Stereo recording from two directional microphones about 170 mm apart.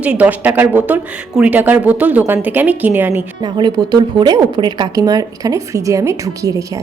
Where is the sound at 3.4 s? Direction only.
25° right (ahead or behind).